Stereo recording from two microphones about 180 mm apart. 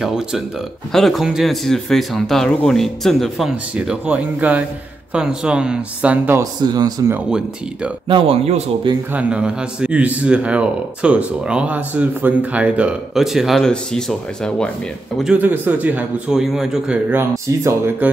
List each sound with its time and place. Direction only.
0.0 s speech: 5° right (ahead or behind)
6.6 s speech: 20° right (ahead or behind)
7.2 s speech: 5° right (ahead or behind)
8.1 s a man's voice: 30° right (ahead or behind)
9.1 s speech: 5° right (ahead or behind)